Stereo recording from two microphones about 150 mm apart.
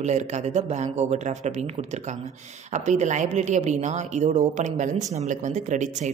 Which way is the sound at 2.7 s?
50° right (ahead or behind).